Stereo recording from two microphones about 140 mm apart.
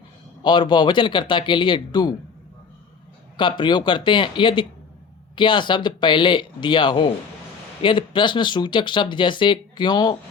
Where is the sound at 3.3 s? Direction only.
35° left (ahead or behind).